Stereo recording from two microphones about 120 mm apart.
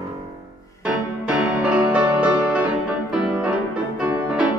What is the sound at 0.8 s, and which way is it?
Music, 10° right (ahead or behind).